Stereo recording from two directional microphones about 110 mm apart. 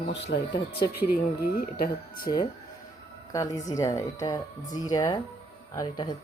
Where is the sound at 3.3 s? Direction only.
30° left (ahead or behind).